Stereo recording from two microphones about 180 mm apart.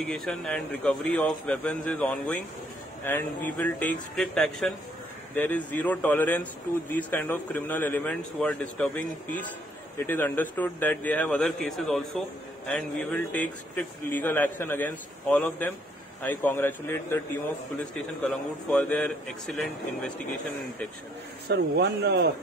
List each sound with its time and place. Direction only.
0.0 s a man's voice: 5° left (ahead or behind)
18.7 s speech: 5° left (ahead or behind)
21.5 s speech: 65° right (ahead or behind)